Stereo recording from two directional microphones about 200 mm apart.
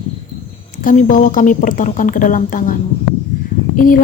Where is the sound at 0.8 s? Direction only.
40° left (ahead or behind).